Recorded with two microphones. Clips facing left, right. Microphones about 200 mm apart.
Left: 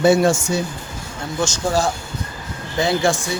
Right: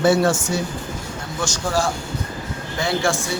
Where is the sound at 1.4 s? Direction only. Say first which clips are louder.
Left 3 dB; 20° left (ahead or behind).